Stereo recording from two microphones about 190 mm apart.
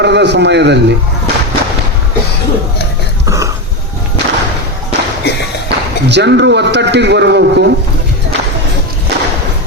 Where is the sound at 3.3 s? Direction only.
15° right (ahead or behind).